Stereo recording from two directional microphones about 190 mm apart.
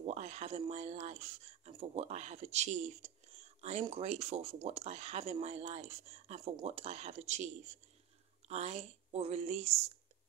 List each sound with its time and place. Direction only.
0.0 s speech: 35° right (ahead or behind)